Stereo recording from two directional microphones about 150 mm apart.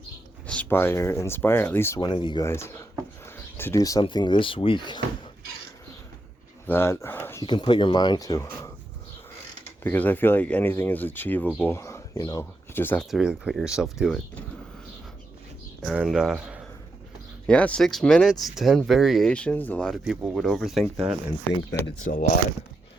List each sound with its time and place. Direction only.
0.4 s speech: 10° left (ahead or behind)
2.0 s speech: 30° left (ahead or behind)
2.5 s speech: 15° left (ahead or behind)
3.2 s a sound: 15° left (ahead or behind)
4.0 s speech: 30° left (ahead or behind)
6.7 s speech: 15° left (ahead or behind)
7.4 s speech: 30° left (ahead or behind)
9.8 s speech: 15° left (ahead or behind)
13.1 s speech: 5° right (ahead or behind)
16.0 s speech: 5° right (ahead or behind)
17.4 s speech: 10° left (ahead or behind)
22.0 s speech: 65° left (ahead or behind)